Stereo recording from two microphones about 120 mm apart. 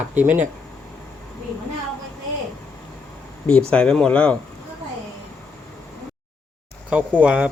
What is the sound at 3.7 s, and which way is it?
Speech, 10° left (ahead or behind).